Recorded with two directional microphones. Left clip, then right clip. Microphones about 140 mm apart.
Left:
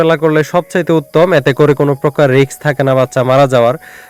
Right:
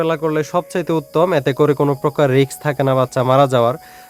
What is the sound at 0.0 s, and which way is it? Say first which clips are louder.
A man's voice: left 8 dB; 35° left (ahead or behind).